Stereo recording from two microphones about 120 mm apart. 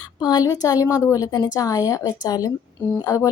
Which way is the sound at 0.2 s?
35° left (ahead or behind).